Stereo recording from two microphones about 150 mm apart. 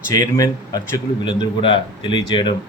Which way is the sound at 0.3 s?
20° left (ahead or behind).